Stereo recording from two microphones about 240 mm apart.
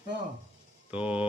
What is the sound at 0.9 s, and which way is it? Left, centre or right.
Speech, centre.